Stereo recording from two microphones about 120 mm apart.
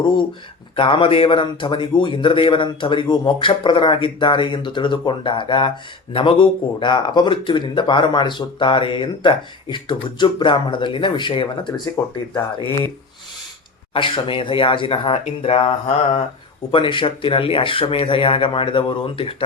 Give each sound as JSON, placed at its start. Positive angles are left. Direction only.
{"t": 0.8, "sound": "a man's voice", "side_deg": 45}
{"t": 12.0, "sound": "speech", "side_deg": 25}
{"t": 13.9, "sound": "a man's voice", "side_deg": 45}
{"t": 16.7, "sound": "a man's voice", "side_deg": 45}